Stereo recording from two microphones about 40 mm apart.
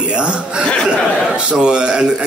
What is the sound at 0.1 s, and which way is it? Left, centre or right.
A man's voice, right.